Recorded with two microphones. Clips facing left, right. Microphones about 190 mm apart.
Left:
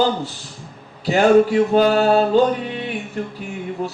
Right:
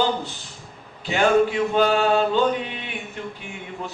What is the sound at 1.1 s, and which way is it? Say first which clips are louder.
A man's voice: left 5 dB; 40° left (ahead or behind).